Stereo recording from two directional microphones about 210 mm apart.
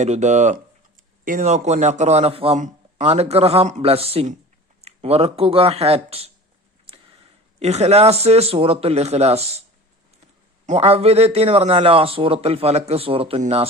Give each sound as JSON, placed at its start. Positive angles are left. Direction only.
{"t": 0.0, "sound": "a man's voice", "side_deg": -35}
{"t": 6.9, "sound": "a sound", "side_deg": -25}
{"t": 7.6, "sound": "a man's voice", "side_deg": -30}
{"t": 10.7, "sound": "a man's voice", "side_deg": -30}